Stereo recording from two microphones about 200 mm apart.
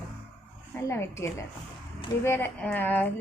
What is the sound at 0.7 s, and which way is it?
A woman's voice, 15° left (ahead or behind).